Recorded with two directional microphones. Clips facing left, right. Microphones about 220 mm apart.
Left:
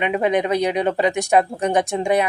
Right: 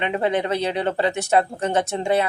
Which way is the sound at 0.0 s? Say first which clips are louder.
Left 3 dB; 15° left (ahead or behind).